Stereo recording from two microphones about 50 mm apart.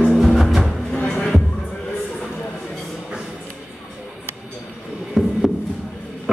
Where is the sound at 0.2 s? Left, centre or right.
Centre.